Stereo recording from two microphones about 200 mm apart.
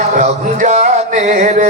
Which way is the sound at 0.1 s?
40° right (ahead or behind).